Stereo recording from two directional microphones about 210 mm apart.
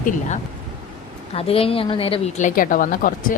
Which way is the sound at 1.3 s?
25° left (ahead or behind).